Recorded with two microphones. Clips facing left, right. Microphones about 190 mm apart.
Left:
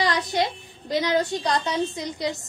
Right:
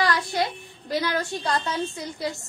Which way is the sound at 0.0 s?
20° left (ahead or behind).